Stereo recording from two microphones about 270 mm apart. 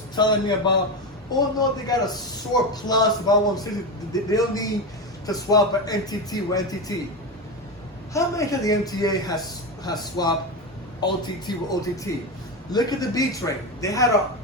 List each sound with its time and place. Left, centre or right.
0.2 s a man's voice: centre
8.1 s a man's voice: centre